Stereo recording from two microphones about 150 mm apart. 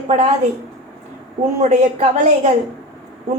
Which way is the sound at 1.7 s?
50° right (ahead or behind).